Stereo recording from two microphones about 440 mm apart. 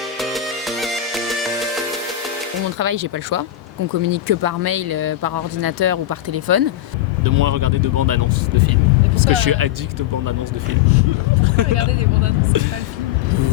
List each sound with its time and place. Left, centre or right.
0.2 s music: centre
2.7 s speech: right
11.4 s vehicle: right
12.5 s speech: right